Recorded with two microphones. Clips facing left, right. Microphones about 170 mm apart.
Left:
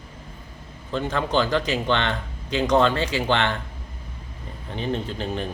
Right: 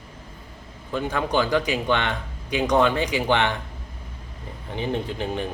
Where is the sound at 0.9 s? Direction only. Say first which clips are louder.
Even; 10° right (ahead or behind).